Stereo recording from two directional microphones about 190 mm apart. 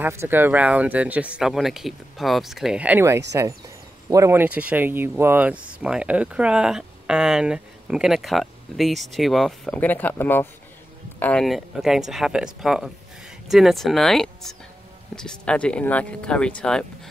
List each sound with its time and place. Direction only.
0.0 s speech: 10° right (ahead or behind); by 16.8 s 5° left (ahead or behind)